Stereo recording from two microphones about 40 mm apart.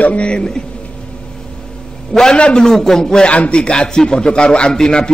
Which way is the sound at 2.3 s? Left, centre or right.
Left.